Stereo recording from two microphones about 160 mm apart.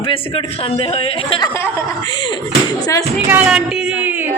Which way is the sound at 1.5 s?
15° left (ahead or behind).